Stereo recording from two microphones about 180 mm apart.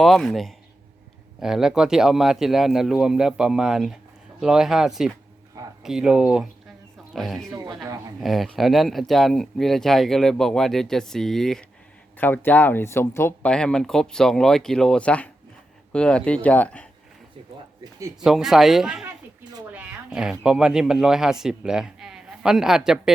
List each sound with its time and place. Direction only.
0.0 s speech: centre (ahead or behind)
7.5 s a woman's voice: 20° right (ahead or behind)
8.2 s speech: centre (ahead or behind)
18.2 s speech: 5° right (ahead or behind)
19.7 s a sound: 5° right (ahead or behind)
20.4 s speech: 5° right (ahead or behind)